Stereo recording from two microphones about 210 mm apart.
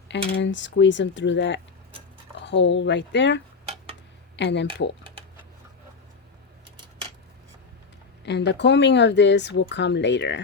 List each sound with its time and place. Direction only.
0.1 s speech: 60° left (ahead or behind)
8.2 s speech: 55° left (ahead or behind)